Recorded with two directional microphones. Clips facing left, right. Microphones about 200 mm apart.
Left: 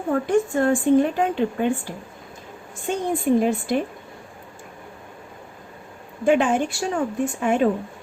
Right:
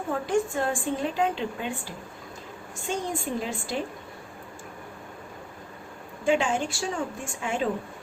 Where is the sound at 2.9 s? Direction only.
60° left (ahead or behind).